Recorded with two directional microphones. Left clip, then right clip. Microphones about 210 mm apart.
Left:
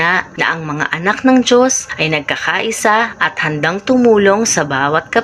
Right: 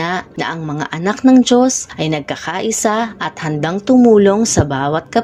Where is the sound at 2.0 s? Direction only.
55° right (ahead or behind).